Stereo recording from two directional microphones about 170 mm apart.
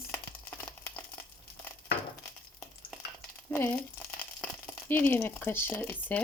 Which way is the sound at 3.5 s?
10° left (ahead or behind).